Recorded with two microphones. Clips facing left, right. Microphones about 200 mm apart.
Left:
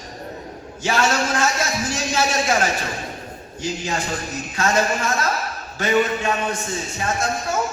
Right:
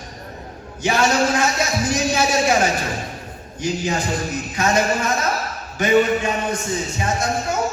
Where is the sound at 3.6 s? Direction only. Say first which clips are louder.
Right 3 dB; 15° right (ahead or behind).